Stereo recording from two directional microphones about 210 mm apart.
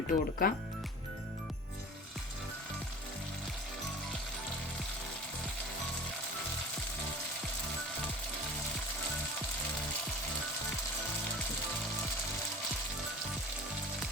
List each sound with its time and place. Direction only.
0.1 s speech: 45° left (ahead or behind)